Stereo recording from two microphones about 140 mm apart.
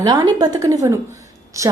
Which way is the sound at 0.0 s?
30° right (ahead or behind).